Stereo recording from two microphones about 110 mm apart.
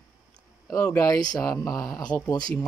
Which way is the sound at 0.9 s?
30° left (ahead or behind).